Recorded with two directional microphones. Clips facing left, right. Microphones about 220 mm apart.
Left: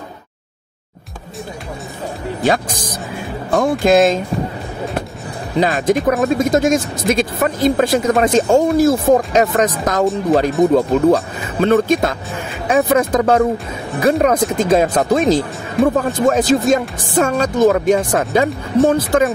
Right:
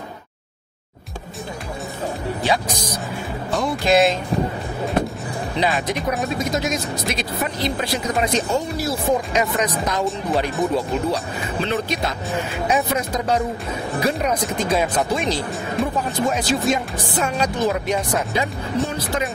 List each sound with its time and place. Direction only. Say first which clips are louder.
2.4 s speech: left 6 dB; 50° left (ahead or behind)
3.4 s music: left 7 dB; 50° left (ahead or behind)
3.8 s speech: left 4 dB; 45° left (ahead or behind)
5.6 s speech: left 8 dB; 45° left (ahead or behind)